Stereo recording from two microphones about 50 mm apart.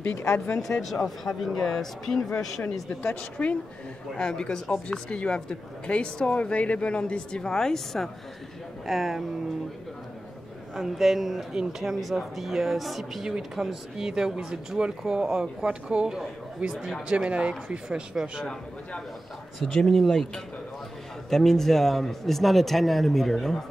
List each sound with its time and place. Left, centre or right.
0.0 s speech: left
0.7 s speech: centre
3.0 s a woman's voice: left
4.1 s a woman's voice: centre
8.8 s speech: centre
10.8 s speech: centre
19.6 s speech: centre